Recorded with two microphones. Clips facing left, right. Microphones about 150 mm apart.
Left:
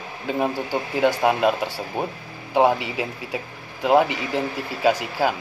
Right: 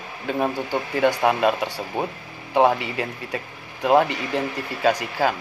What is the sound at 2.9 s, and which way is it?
Speech, 5° left (ahead or behind).